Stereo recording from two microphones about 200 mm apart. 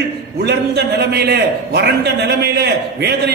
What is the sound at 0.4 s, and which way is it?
A man's voice, 55° right (ahead or behind).